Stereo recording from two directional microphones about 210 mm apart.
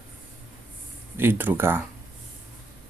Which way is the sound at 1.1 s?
10° right (ahead or behind).